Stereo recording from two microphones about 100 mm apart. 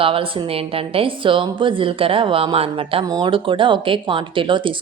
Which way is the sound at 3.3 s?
60° right (ahead or behind).